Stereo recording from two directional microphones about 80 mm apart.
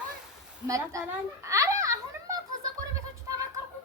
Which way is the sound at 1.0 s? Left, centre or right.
Right.